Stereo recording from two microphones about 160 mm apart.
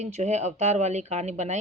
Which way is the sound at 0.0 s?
45° right (ahead or behind).